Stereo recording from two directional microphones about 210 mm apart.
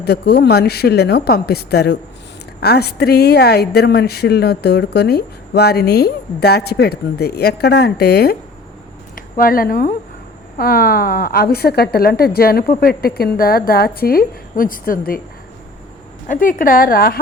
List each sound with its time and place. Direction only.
0.0 s speech: 50° left (ahead or behind)
16.2 s speech: 40° left (ahead or behind)